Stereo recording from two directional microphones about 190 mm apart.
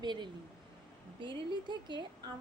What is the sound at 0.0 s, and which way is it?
Speech, 25° right (ahead or behind).